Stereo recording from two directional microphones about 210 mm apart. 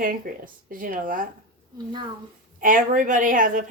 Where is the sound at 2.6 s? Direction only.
40° right (ahead or behind).